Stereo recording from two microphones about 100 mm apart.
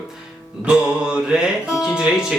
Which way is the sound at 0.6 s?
10° right (ahead or behind).